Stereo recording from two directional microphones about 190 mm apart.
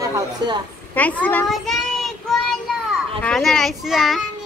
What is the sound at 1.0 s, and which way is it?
Child singing, 10° left (ahead or behind).